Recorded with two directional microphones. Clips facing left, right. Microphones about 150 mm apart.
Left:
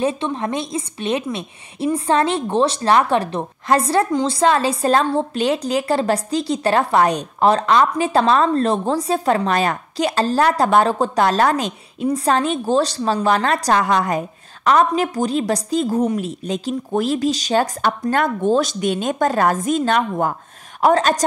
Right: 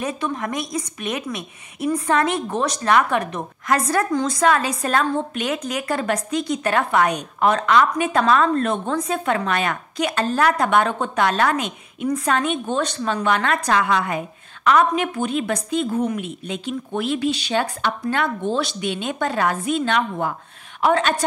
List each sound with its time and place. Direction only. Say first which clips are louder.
0.0 s a woman's voice: left 4 dB; 30° left (ahead or behind)